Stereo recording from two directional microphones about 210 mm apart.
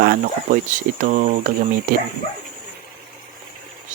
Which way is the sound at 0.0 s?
45° right (ahead or behind).